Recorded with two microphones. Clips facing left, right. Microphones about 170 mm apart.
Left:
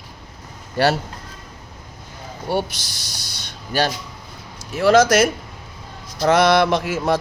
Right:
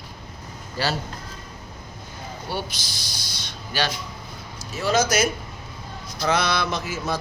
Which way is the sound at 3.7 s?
50° left (ahead or behind).